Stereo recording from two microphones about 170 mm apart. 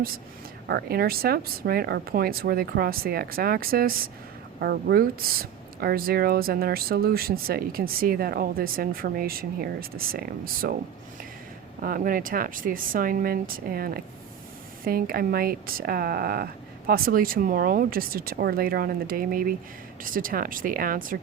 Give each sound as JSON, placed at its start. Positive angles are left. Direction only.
{"t": 0.7, "sound": "speech", "side_deg": -65}
{"t": 11.8, "sound": "speech", "side_deg": -55}